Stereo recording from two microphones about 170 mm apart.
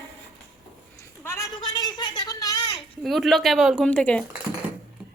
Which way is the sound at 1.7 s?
25° left (ahead or behind).